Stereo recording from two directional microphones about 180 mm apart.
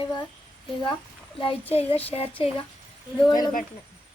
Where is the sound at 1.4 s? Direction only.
30° left (ahead or behind).